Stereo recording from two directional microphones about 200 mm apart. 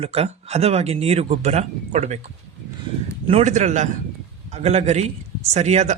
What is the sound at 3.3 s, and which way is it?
Speech, 35° right (ahead or behind).